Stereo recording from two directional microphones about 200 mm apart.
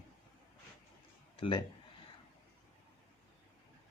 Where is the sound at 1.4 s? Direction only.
25° left (ahead or behind).